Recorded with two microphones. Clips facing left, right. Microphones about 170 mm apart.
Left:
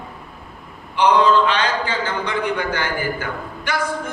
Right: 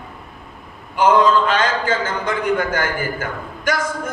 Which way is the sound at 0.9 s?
45° right (ahead or behind).